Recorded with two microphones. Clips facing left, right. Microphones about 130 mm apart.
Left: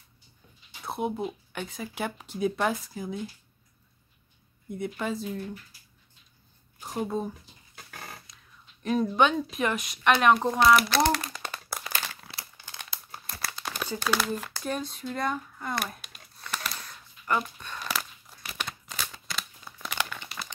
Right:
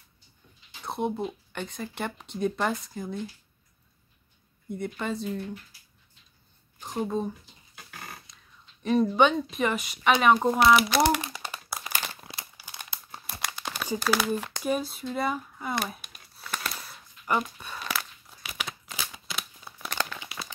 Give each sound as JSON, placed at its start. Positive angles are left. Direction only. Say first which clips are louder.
{"t": 0.8, "sound": "speech", "louder": "right 1 dB", "side_deg": 5}
{"t": 4.6, "sound": "speech", "louder": "even", "side_deg": 0}
{"t": 6.8, "sound": "speech", "louder": "right 1 dB", "side_deg": 5}
{"t": 8.8, "sound": "speech", "louder": "right 2 dB", "side_deg": 0}
{"t": 10.9, "sound": "crumpling", "louder": "right 1 dB", "side_deg": -10}
{"t": 13.6, "sound": "crumpling", "louder": "left 2 dB", "side_deg": 0}
{"t": 13.8, "sound": "speech", "louder": "right 2 dB", "side_deg": -10}
{"t": 14.6, "sound": "crumpling", "louder": "right 4 dB", "side_deg": -5}